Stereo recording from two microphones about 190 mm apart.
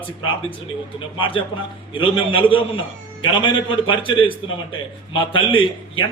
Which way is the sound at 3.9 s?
25° left (ahead or behind).